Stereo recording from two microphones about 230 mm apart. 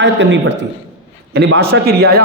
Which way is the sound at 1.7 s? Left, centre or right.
Right.